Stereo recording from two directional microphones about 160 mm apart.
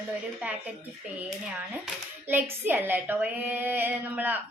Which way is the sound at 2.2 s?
15° right (ahead or behind).